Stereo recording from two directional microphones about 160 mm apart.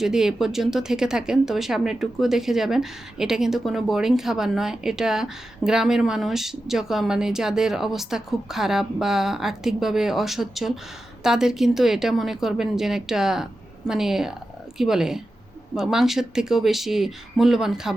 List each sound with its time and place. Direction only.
0.0 s speech: 5° right (ahead or behind)